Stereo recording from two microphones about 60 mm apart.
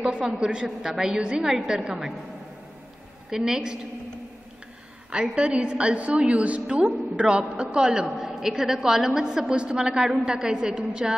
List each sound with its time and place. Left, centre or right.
0.0 s a woman's voice: centre
3.3 s a woman's voice: centre
5.1 s a woman's voice: centre